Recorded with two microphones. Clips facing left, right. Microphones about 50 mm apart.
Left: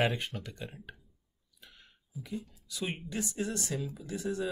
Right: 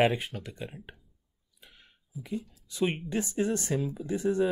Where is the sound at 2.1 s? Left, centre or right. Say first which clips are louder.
Right 2 dB; centre.